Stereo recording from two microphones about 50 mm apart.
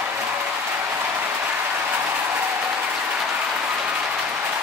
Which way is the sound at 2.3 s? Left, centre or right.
Right.